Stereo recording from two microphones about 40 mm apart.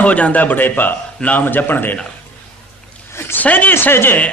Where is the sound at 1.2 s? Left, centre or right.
Left.